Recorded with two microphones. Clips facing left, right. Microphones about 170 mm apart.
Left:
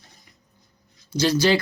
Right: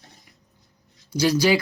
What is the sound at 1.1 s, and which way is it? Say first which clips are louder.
Speech: even; 10° right (ahead or behind).